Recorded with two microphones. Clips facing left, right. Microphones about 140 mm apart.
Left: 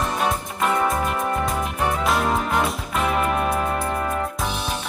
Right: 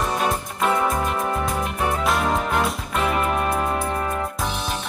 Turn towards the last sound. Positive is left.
turn(degrees=0)  # may be behind; listen again after turning